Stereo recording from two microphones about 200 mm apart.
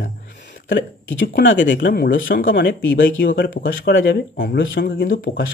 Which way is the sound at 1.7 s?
50° left (ahead or behind).